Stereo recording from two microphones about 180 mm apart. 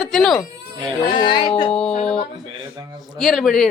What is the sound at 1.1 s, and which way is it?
Speech, 25° left (ahead or behind).